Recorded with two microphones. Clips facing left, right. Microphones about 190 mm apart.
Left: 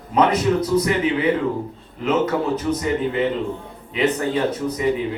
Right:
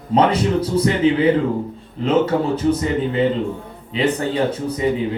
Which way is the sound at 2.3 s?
30° right (ahead or behind).